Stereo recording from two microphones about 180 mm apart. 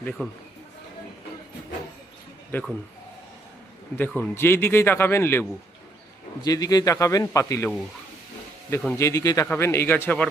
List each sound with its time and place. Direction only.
0.0 s a man's voice: 5° left (ahead or behind)
2.5 s speech: 10° left (ahead or behind)
3.9 s a man's voice: 10° left (ahead or behind)
9.0 s a man's voice: 15° left (ahead or behind)